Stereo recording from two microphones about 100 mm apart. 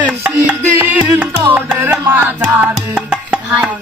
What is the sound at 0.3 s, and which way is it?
Music, 15° right (ahead or behind).